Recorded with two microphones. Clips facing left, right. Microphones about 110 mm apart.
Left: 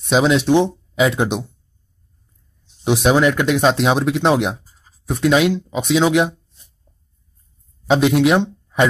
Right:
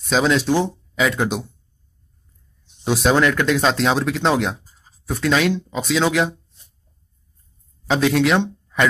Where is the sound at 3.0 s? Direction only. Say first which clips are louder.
Left 2 dB; 15° left (ahead or behind).